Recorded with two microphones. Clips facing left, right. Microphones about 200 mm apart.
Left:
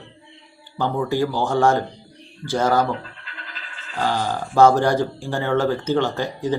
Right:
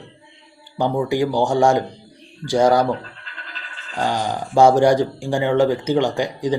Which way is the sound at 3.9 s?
15° right (ahead or behind).